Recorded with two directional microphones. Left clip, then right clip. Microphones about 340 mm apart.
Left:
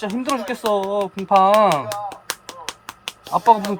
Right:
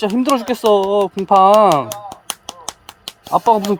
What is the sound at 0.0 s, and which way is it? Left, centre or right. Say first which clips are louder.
Speech: right 7 dB; right.